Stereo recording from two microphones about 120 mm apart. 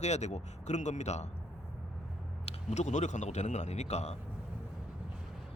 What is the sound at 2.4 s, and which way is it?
A man's voice, 70° left (ahead or behind).